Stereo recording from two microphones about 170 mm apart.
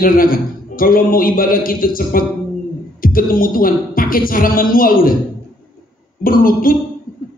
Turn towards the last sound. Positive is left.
turn(degrees=55)  # may be behind; listen again after turning